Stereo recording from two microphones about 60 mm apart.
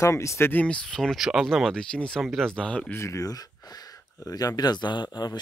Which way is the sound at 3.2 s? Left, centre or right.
Left.